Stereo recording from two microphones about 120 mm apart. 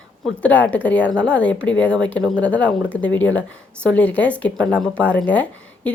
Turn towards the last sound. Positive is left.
turn(degrees=10)  # may be behind; listen again after turning